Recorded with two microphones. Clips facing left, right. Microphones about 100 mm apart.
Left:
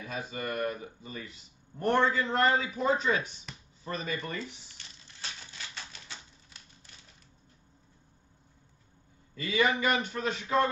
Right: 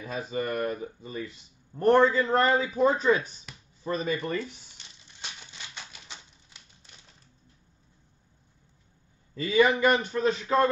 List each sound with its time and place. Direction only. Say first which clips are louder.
0.0 s a man's voice: right 5 dB; 35° right (ahead or behind)
5.5 s typewriter: even; 20° right (ahead or behind)
9.3 s a man's voice: right 6 dB; 35° right (ahead or behind)